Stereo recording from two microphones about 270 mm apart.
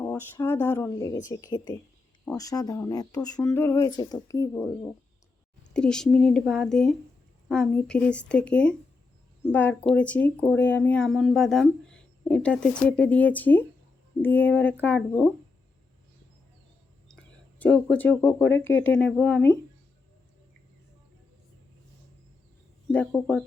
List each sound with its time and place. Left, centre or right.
0.0 s speech: centre
17.6 s speech: centre
22.9 s speech: centre